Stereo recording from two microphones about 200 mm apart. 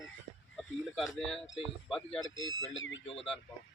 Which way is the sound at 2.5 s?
75° left (ahead or behind).